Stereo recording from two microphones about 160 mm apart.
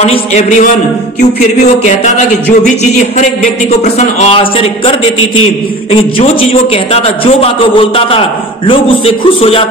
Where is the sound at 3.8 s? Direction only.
45° left (ahead or behind).